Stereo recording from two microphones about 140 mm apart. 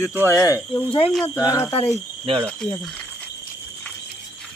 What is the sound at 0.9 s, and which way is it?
Speech, 40° left (ahead or behind).